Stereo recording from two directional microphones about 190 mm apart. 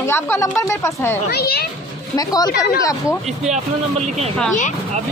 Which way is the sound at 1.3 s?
55° left (ahead or behind).